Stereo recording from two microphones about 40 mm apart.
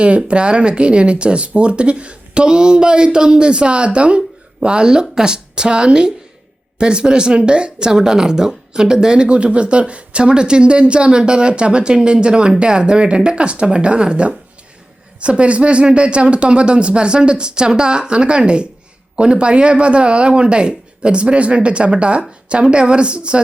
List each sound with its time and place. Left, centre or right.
0.0 s speech: right